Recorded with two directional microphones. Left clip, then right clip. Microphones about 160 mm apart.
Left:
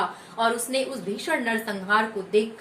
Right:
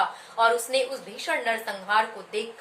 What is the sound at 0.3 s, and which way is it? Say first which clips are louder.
A woman's voice: right 2 dB; 30° right (ahead or behind).